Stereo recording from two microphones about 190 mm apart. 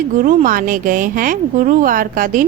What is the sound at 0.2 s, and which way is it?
A woman's voice, 40° right (ahead or behind).